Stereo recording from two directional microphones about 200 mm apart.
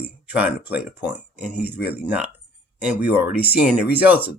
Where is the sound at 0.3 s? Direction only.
5° right (ahead or behind).